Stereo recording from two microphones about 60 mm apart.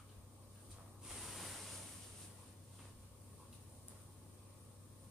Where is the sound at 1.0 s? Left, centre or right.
Centre.